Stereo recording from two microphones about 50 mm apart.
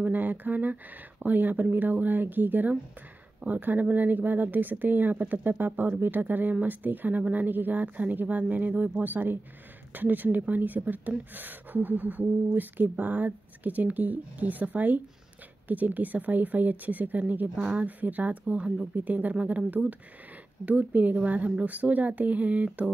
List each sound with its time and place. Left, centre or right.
0.0 s a woman's voice: right